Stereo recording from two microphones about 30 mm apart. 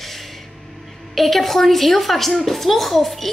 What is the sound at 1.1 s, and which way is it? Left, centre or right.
A woman's voice, centre.